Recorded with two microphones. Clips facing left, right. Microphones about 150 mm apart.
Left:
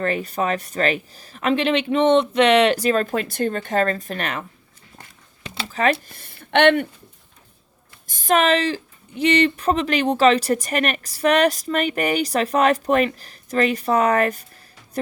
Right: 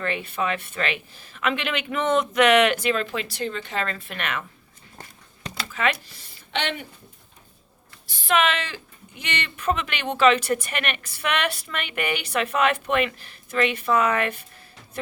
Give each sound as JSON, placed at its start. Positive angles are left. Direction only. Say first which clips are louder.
{"t": 0.0, "sound": "speech", "louder": "left 4 dB", "side_deg": 40}
{"t": 5.6, "sound": "speech", "louder": "left 5 dB", "side_deg": 35}
{"t": 6.1, "sound": "speech", "louder": "left 13 dB", "side_deg": 55}
{"t": 8.0, "sound": "speech", "louder": "left 4 dB", "side_deg": 45}